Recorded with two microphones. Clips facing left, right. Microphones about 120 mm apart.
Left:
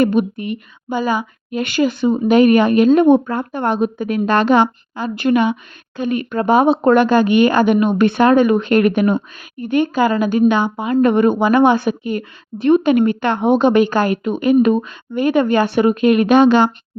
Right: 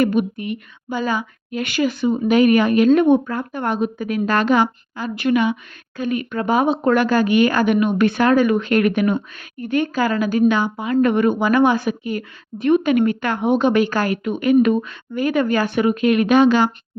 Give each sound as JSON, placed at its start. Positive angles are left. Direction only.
{"t": 0.0, "sound": "a woman's voice", "side_deg": 25}
{"t": 0.9, "sound": "a woman's voice", "side_deg": 15}
{"t": 9.6, "sound": "a woman's voice", "side_deg": 20}